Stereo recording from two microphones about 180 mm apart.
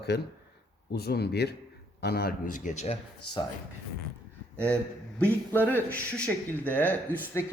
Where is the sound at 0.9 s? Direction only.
60° left (ahead or behind); by 3.0 s 40° left (ahead or behind).